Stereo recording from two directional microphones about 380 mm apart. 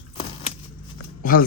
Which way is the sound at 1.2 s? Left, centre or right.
Left.